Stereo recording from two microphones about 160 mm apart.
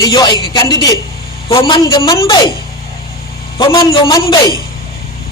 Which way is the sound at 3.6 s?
25° left (ahead or behind).